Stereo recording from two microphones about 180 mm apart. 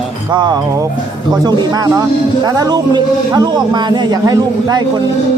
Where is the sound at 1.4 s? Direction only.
25° right (ahead or behind).